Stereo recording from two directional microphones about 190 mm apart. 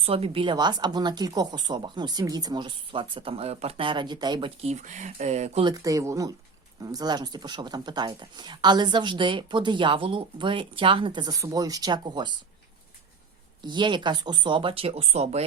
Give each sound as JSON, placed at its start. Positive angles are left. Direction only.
{"t": 0.0, "sound": "speech", "side_deg": -30}
{"t": 5.6, "sound": "speech", "side_deg": -20}
{"t": 13.6, "sound": "speech", "side_deg": -25}